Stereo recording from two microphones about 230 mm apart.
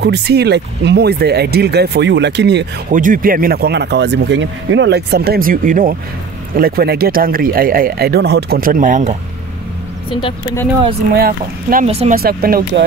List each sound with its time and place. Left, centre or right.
0.0 s speech: right
11.1 s speech: right
11.9 s speech: right
12.2 s speech: right